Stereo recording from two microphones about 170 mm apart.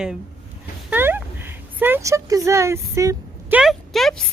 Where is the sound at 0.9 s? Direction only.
10° right (ahead or behind).